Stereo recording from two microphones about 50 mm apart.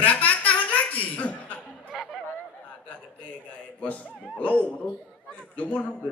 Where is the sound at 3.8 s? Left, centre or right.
Left.